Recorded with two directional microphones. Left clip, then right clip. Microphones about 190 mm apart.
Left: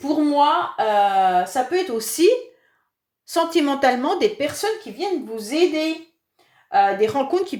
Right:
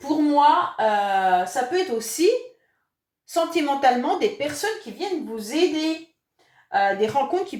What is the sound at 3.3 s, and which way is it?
A woman's voice, 50° left (ahead or behind).